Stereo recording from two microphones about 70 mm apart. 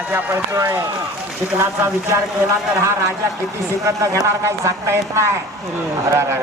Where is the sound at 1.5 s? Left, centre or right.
Right.